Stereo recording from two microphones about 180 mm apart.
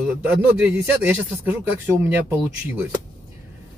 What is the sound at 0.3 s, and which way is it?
A man's voice, 5° right (ahead or behind).